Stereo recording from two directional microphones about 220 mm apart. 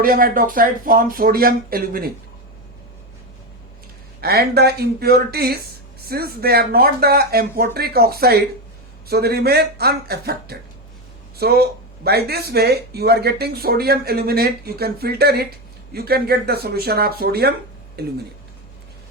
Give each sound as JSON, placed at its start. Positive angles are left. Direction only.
{"t": 0.0, "sound": "speech", "side_deg": -40}
{"t": 4.2, "sound": "speech", "side_deg": -45}